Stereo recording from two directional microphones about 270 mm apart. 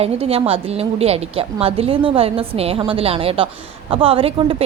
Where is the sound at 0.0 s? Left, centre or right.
Right.